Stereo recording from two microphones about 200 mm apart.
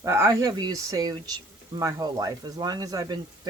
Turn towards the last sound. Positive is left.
turn(degrees=-20)  # may be behind; listen again after turning